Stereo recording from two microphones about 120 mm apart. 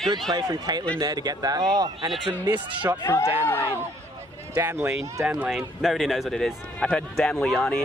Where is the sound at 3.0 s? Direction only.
20° left (ahead or behind).